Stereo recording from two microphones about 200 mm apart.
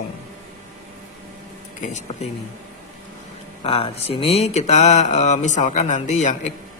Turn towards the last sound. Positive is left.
turn(degrees=35)  # may be behind; listen again after turning